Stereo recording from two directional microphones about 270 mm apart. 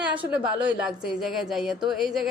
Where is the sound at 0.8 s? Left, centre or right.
Centre.